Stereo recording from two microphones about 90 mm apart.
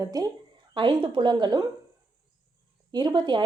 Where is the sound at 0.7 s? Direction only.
65° right (ahead or behind).